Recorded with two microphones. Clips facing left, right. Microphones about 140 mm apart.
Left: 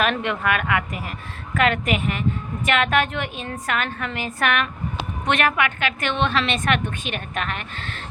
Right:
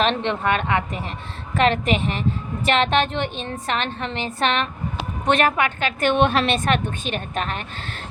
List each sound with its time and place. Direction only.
0.0 s a woman's voice: 25° right (ahead or behind)